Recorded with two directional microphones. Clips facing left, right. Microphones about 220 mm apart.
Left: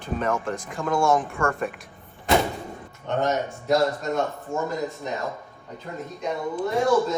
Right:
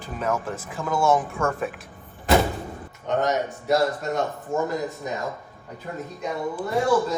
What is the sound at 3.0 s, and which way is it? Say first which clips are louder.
Speech: right 1 dB; 15° right (ahead or behind).